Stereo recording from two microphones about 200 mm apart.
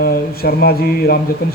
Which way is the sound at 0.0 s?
50° left (ahead or behind).